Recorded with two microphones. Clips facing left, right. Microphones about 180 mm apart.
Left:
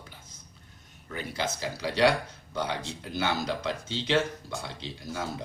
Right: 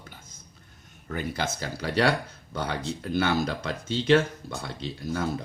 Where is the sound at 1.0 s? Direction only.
50° right (ahead or behind).